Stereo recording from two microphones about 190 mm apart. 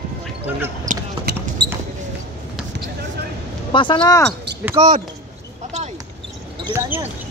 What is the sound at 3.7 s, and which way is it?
Speech, 25° left (ahead or behind).